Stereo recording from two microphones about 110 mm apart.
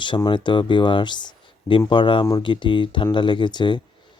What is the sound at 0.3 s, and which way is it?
Speech, 45° left (ahead or behind).